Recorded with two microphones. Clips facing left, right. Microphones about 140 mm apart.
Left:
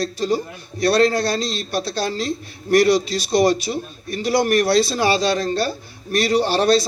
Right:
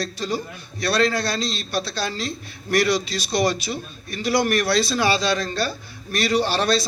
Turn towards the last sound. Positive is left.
turn(degrees=45)  # may be behind; listen again after turning